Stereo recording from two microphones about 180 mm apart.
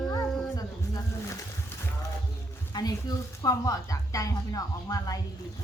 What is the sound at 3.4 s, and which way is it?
A woman's voice, 20° left (ahead or behind).